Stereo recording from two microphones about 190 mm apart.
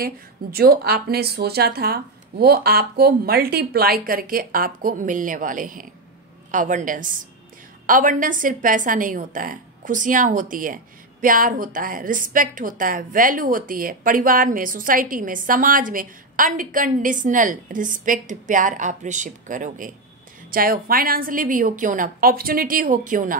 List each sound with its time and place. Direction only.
0.0 s a woman's voice: 50° right (ahead or behind)